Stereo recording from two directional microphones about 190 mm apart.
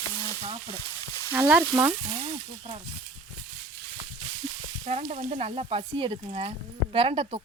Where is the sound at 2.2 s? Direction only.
30° right (ahead or behind).